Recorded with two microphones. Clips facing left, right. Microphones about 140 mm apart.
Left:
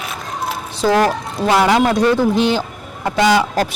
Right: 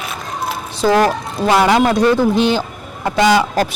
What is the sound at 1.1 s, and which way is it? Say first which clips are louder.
Speech: right 1 dB; 10° right (ahead or behind).